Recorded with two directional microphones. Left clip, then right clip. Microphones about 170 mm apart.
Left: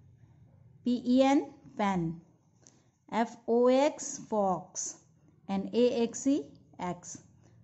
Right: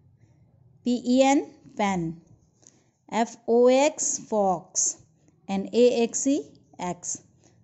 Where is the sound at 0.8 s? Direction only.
20° right (ahead or behind).